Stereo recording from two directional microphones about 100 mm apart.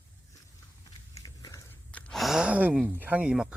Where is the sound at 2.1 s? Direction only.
5° right (ahead or behind).